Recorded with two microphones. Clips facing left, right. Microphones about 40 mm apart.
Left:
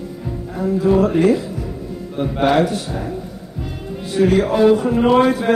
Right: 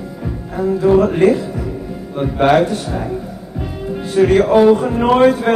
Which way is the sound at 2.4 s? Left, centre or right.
Right.